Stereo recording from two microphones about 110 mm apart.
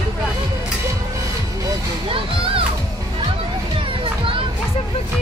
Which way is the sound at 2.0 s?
55° right (ahead or behind).